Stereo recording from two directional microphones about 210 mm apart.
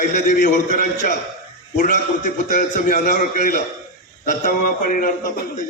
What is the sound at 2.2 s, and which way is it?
A man's voice, 35° left (ahead or behind).